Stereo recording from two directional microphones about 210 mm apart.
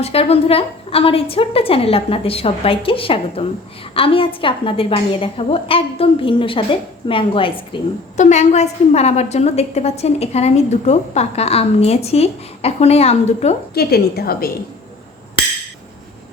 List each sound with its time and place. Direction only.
0.0 s a woman's voice: 30° left (ahead or behind)
13.7 s a woman's voice: 45° left (ahead or behind)